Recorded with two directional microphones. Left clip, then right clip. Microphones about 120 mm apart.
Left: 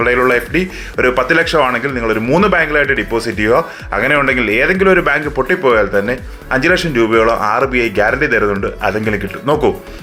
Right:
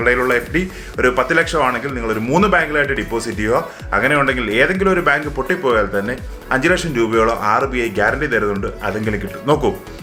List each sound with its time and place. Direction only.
0.0 s speech: 30° left (ahead or behind)